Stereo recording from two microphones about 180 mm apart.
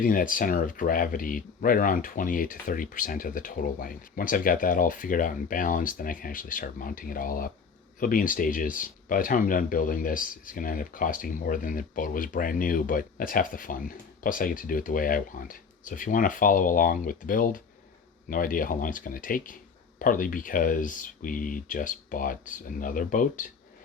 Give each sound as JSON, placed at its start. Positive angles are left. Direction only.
{"t": 0.0, "sound": "speech", "side_deg": 50}